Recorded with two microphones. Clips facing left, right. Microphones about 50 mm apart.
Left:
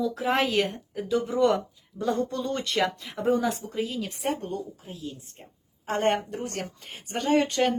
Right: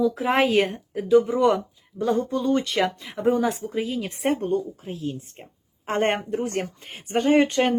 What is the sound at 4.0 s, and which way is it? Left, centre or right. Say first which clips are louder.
Speech: right 5 dB; right.